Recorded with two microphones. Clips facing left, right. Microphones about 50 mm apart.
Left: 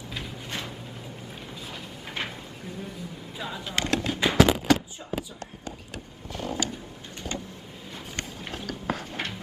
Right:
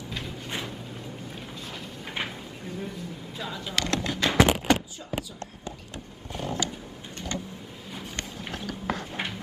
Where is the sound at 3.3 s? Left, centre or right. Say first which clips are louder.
Left 1 dB; centre.